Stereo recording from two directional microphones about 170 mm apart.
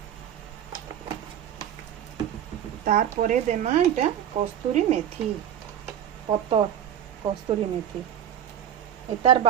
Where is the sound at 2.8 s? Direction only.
50° right (ahead or behind); by 4.5 s 35° right (ahead or behind).